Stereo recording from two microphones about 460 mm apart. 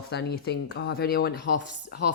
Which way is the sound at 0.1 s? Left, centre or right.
Left.